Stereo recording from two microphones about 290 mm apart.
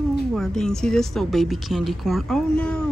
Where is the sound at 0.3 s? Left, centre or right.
Centre.